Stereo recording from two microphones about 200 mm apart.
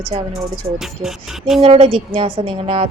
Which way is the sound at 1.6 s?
30° right (ahead or behind).